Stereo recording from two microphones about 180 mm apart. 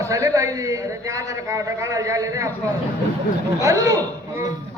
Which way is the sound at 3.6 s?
20° right (ahead or behind).